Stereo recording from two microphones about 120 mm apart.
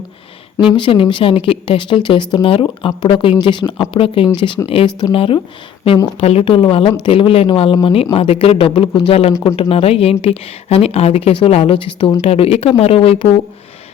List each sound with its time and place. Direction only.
0.8 s a woman's voice: 45° left (ahead or behind)